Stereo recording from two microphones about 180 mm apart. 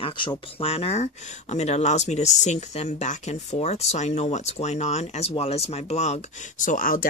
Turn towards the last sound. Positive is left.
turn(degrees=50)  # may be behind; listen again after turning